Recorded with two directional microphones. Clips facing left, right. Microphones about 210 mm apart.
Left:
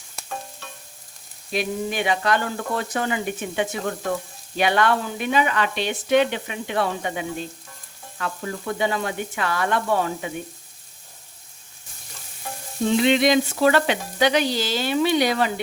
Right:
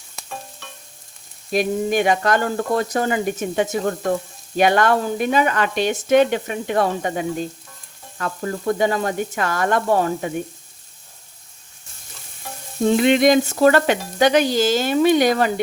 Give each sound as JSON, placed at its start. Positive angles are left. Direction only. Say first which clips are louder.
{"t": 1.5, "sound": "frying", "louder": "right 6 dB", "side_deg": -45}
{"t": 12.8, "sound": "frying", "louder": "right 4 dB", "side_deg": -50}